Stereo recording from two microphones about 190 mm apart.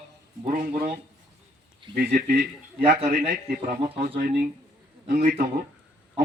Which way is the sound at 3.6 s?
40° right (ahead or behind).